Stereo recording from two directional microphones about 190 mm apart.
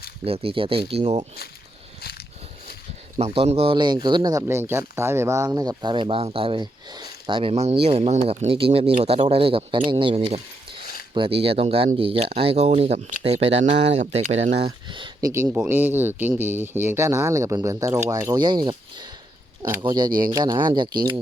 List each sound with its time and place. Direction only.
0.3 s speech: 30° right (ahead or behind)
2.0 s a sound: 55° left (ahead or behind)
3.2 s speech: 35° right (ahead or behind)
15.3 s speech: 10° right (ahead or behind)
19.6 s speech: 10° right (ahead or behind)
20.1 s speech: 50° right (ahead or behind)
20.3 s speech: 20° right (ahead or behind)